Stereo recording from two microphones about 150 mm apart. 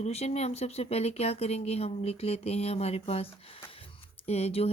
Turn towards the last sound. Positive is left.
turn(degrees=40)  # may be behind; listen again after turning